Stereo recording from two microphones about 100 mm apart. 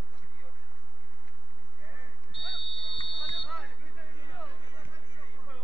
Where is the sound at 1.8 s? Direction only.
20° right (ahead or behind).